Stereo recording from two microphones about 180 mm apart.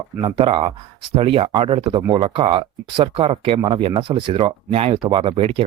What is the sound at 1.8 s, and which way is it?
A man's voice, 20° right (ahead or behind).